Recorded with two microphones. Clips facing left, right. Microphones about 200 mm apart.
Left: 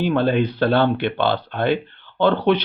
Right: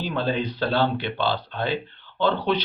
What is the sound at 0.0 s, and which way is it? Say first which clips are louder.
Speech: left 7 dB; 60° left (ahead or behind).